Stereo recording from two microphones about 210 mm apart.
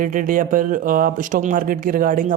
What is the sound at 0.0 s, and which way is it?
Speech, 40° right (ahead or behind).